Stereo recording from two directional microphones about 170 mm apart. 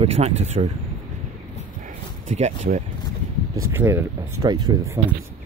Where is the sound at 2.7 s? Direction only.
55° right (ahead or behind).